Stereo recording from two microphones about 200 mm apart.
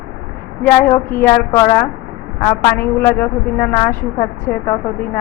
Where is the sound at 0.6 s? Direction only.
10° left (ahead or behind).